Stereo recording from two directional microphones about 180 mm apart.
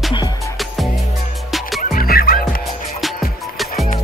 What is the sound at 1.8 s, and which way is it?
Music, 55° left (ahead or behind).